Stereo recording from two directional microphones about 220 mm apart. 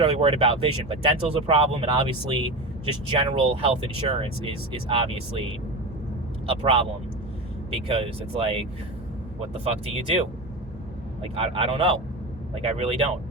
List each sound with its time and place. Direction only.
0.0 s speech: 25° right (ahead or behind)
9.6 s speech: 25° right (ahead or behind)
11.2 s speech: 25° right (ahead or behind)